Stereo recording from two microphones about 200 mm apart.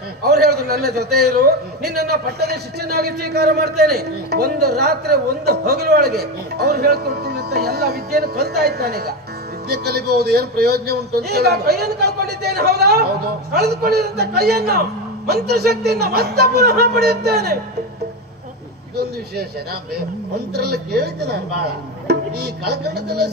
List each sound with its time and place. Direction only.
0.2 s a man's voice: 55° right (ahead or behind)
20.5 s a man's voice: 55° right (ahead or behind)
22.0 s music: 55° right (ahead or behind)